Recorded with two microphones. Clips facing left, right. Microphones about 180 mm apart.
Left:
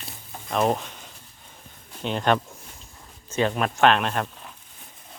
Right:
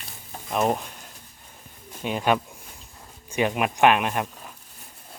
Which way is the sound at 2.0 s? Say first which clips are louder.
Even; 10° right (ahead or behind).